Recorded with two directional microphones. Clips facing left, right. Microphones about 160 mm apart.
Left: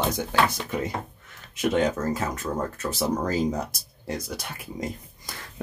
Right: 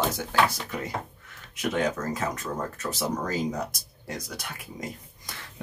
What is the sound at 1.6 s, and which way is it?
Speech, 25° left (ahead or behind).